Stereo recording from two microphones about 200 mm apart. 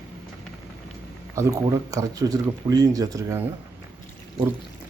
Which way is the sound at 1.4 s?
15° right (ahead or behind).